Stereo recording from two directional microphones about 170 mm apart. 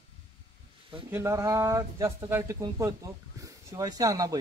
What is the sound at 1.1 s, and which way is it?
Speech, 15° right (ahead or behind).